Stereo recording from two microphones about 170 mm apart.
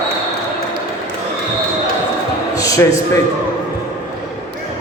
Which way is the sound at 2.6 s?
20° left (ahead or behind).